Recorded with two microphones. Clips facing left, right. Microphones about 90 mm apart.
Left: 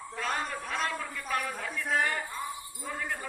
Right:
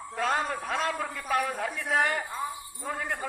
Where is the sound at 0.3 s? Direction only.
85° right.